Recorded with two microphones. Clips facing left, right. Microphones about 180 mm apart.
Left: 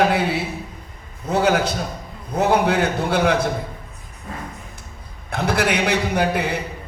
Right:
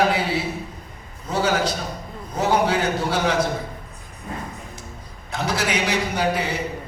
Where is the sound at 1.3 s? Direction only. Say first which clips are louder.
Left 3 dB; 55° left (ahead or behind).